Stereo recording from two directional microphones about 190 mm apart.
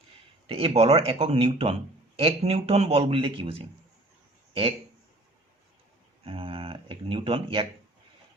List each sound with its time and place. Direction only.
0.4 s speech: 30° right (ahead or behind)
6.2 s speech: 30° right (ahead or behind)